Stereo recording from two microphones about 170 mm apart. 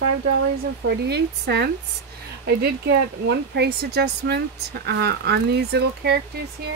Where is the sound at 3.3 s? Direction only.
75° right (ahead or behind).